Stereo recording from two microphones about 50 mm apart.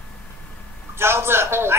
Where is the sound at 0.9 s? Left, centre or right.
Right.